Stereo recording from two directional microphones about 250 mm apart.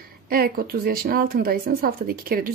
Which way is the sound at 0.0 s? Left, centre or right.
Right.